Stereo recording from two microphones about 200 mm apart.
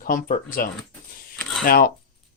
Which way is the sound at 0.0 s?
45° left (ahead or behind).